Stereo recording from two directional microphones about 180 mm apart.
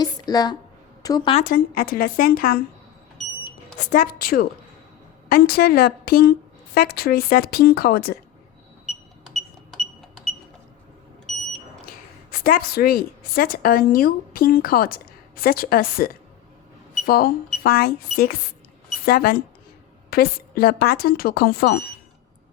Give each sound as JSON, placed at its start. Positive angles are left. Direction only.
{"t": 0.0, "sound": "a sound", "side_deg": 20}
{"t": 1.0, "sound": "a woman's voice", "side_deg": 25}
{"t": 1.5, "sound": "a woman's voice", "side_deg": 55}
{"t": 3.9, "sound": "a woman's voice", "side_deg": 50}
{"t": 9.3, "sound": "a sound", "side_deg": 0}
{"t": 11.9, "sound": "a woman's voice", "side_deg": 50}